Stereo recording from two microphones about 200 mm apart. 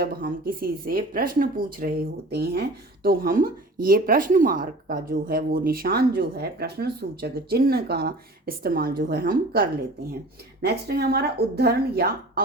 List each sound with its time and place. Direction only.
0.0 s a woman's voice: 45° right (ahead or behind)